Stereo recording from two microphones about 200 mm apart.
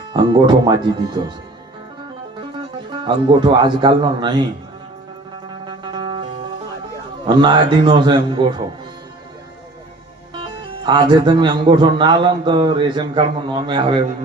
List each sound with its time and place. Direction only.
0.1 s speech: 25° right (ahead or behind)
3.0 s speech: 25° right (ahead or behind)
5.6 s music: 25° right (ahead or behind)
7.3 s speech: 25° right (ahead or behind)
10.3 s speech: 25° right (ahead or behind)